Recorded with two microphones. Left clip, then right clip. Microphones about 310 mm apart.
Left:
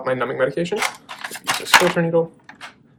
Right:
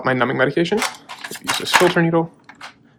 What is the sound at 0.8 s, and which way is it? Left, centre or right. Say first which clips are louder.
Scissors: even; centre.